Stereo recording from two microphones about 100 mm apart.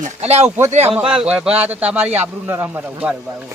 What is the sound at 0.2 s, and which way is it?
Speech, 90° right.